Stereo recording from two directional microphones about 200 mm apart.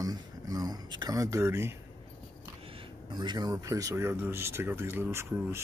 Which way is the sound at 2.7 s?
20° right (ahead or behind).